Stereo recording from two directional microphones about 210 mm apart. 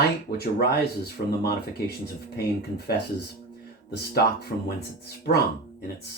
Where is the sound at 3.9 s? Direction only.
50° left (ahead or behind).